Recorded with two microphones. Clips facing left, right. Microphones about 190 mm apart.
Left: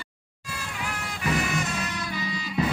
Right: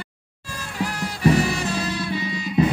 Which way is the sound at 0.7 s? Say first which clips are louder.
Right 9 dB; 35° right (ahead or behind).